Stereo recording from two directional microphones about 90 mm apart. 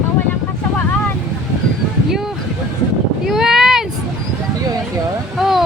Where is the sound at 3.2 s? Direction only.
5° right (ahead or behind).